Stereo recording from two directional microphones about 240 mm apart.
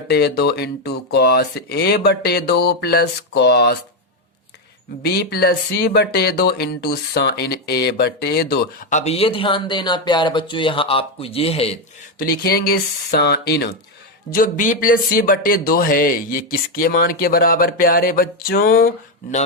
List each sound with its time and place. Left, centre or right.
0.1 s speech: left
5.0 s speech: left
12.2 s speech: left